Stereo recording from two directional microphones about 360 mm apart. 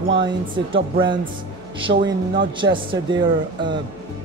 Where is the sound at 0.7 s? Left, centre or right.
Centre.